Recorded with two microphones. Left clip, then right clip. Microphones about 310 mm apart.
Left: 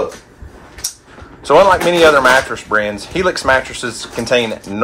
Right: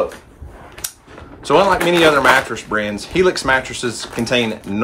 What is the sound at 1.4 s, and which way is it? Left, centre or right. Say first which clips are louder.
Speech: left 4 dB; centre.